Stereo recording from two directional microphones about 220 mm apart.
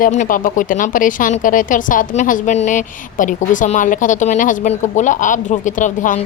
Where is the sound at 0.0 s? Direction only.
35° left (ahead or behind).